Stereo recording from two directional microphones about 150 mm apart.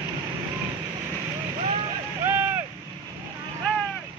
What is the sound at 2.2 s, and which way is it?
Vehicle, 15° right (ahead or behind).